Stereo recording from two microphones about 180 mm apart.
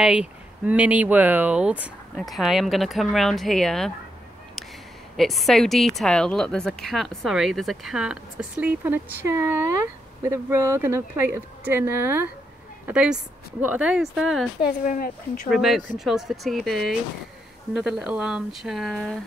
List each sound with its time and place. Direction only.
0.0 s speech: 5° right (ahead or behind)
5.1 s speech: centre (ahead or behind)
14.6 s speech: 50° left (ahead or behind)
15.5 s speech: centre (ahead or behind)